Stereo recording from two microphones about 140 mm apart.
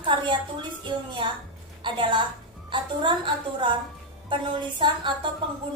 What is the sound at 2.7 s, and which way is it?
A woman's voice, 35° right (ahead or behind).